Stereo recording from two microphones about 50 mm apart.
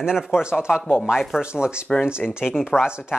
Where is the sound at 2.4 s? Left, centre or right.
Centre.